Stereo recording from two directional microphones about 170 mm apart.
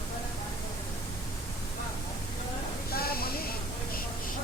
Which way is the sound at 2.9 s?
65° left (ahead or behind).